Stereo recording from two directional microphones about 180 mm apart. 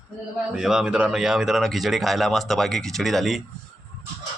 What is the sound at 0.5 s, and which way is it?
Speech, 5° right (ahead or behind).